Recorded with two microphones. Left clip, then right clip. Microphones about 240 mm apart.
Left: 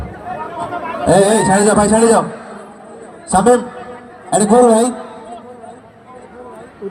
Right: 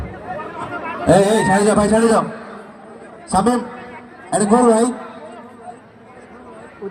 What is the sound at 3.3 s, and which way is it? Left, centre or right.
A man's voice, centre.